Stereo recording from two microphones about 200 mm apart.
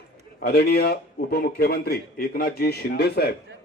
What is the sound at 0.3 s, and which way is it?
A man's voice, 50° left (ahead or behind).